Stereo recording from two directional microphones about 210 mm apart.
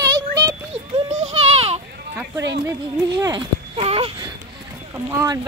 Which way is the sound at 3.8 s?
25° right (ahead or behind).